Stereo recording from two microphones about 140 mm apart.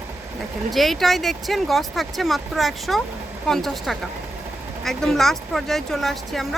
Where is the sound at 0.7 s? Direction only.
Centre (ahead or behind).